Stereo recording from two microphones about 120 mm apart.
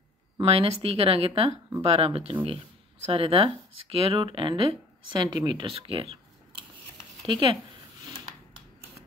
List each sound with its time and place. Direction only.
0.4 s speech: 55° right (ahead or behind)
7.2 s speech: 40° right (ahead or behind)